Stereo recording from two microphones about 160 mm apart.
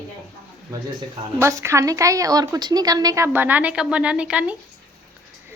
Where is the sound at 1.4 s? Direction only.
15° right (ahead or behind).